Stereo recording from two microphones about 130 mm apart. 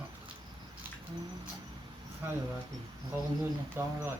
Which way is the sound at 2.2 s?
20° right (ahead or behind).